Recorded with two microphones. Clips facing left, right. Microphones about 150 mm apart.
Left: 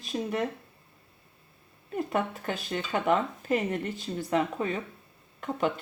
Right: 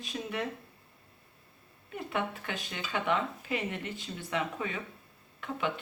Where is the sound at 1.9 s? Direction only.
40° left (ahead or behind).